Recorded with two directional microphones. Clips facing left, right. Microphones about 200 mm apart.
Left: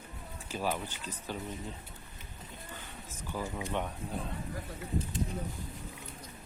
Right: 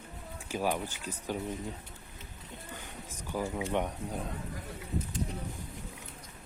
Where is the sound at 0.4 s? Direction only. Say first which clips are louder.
Right 3 dB; 10° right (ahead or behind).